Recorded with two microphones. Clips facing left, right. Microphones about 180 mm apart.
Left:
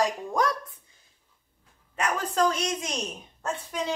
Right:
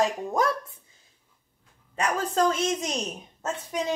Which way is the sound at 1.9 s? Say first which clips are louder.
Right 2 dB; 25° right (ahead or behind).